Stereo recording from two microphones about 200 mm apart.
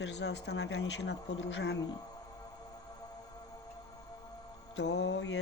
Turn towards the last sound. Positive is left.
turn(degrees=60)  # may be behind; listen again after turning